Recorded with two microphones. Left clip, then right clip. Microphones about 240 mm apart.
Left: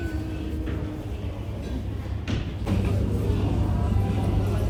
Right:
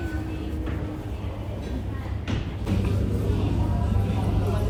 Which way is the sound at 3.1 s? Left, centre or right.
Centre.